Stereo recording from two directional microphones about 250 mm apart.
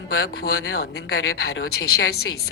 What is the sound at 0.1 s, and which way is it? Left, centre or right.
A woman's voice, left.